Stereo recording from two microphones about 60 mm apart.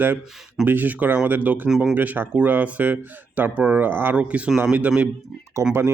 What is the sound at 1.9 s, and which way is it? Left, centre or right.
Speech, right.